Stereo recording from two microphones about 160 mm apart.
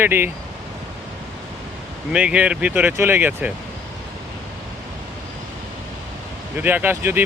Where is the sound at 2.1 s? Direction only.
5° right (ahead or behind).